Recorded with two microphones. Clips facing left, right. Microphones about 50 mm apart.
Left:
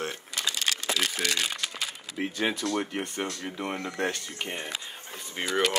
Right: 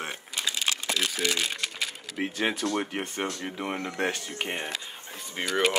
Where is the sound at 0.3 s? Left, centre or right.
Left.